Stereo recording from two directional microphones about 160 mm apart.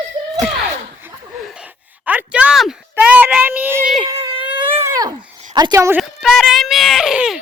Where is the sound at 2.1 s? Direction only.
10° right (ahead or behind).